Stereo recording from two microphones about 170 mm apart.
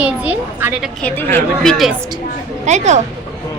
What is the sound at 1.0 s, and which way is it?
Speech, 10° left (ahead or behind).